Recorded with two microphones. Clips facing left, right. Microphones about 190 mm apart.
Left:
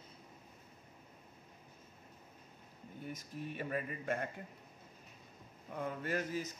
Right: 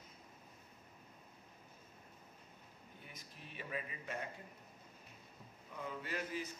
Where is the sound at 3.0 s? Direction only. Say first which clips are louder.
Left 15 dB; 45° left (ahead or behind).